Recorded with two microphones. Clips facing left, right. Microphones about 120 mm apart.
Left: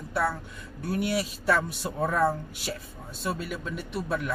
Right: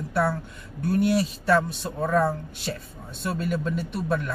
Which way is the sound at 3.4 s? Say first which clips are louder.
Right 7 dB; 45° right (ahead or behind).